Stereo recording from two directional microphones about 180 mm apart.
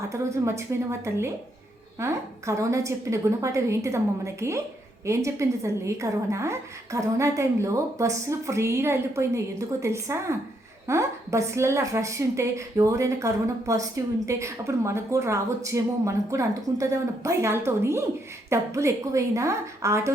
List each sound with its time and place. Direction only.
0.1 s a woman's voice: 15° right (ahead or behind)